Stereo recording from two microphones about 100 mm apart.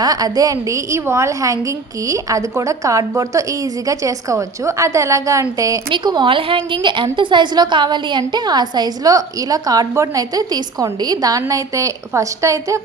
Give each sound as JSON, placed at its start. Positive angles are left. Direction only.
{"t": 0.0, "sound": "a woman's voice", "side_deg": -40}
{"t": 5.9, "sound": "a woman's voice", "side_deg": -45}